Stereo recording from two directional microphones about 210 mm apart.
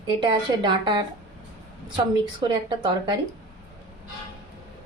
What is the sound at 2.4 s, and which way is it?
Speech, 20° right (ahead or behind).